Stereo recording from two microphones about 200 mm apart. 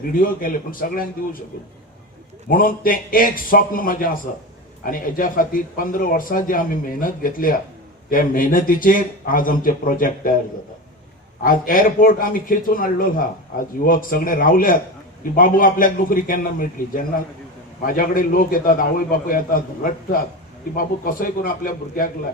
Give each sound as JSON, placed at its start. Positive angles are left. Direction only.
{"t": 0.1, "sound": "a man's voice", "side_deg": 45}
{"t": 2.5, "sound": "a man's voice", "side_deg": 45}
{"t": 11.4, "sound": "a man's voice", "side_deg": 45}